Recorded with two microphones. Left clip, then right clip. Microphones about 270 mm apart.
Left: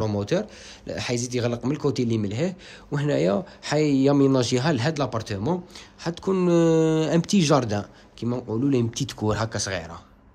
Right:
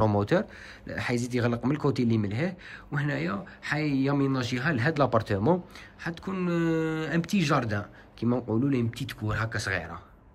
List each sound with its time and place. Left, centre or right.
0.0 s speech: centre